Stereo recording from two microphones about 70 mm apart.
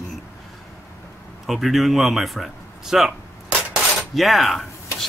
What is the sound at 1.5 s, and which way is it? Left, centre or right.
Speech, centre.